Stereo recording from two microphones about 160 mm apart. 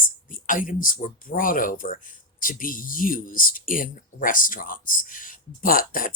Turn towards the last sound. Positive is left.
turn(degrees=60)  # may be behind; listen again after turning